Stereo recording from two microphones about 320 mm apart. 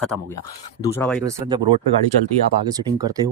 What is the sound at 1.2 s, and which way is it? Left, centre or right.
Speech, centre.